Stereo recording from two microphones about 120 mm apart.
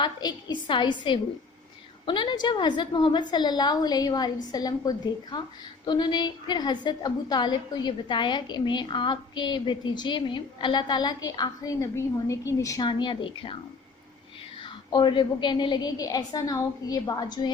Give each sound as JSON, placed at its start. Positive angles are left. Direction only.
{"t": 0.0, "sound": "a woman's voice", "side_deg": 35}
{"t": 12.8, "sound": "a woman's voice", "side_deg": 40}
{"t": 14.6, "sound": "a woman's voice", "side_deg": 40}